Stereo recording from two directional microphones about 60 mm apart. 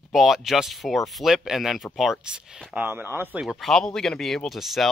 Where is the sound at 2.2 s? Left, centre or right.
Right.